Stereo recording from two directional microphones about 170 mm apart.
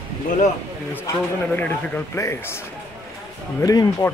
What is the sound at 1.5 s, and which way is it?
Speech, 10° left (ahead or behind).